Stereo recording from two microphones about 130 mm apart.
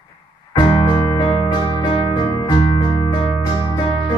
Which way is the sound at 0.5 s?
45° left (ahead or behind).